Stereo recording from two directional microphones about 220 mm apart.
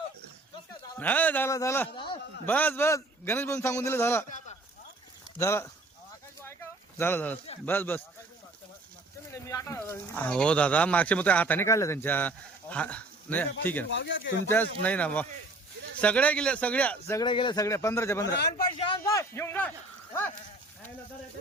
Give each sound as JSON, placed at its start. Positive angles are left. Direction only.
{"t": 0.9, "sound": "speech", "side_deg": 5}
{"t": 5.4, "sound": "speech", "side_deg": 15}
{"t": 6.4, "sound": "a sound", "side_deg": 10}
{"t": 7.6, "sound": "speech", "side_deg": 10}
{"t": 9.3, "sound": "speech", "side_deg": 15}
{"t": 13.9, "sound": "speech", "side_deg": 55}
{"t": 14.4, "sound": "speech", "side_deg": 10}
{"t": 17.1, "sound": "a man's voice", "side_deg": 20}